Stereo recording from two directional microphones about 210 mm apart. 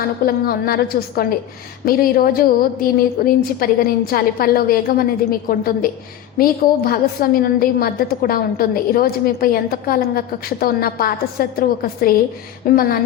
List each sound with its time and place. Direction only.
0.3 s a woman's voice: 45° left (ahead or behind)